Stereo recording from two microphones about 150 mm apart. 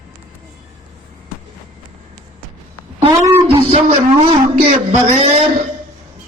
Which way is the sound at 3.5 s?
40° right (ahead or behind).